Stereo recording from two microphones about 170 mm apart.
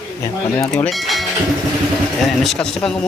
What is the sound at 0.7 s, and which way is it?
Speech, centre (ahead or behind).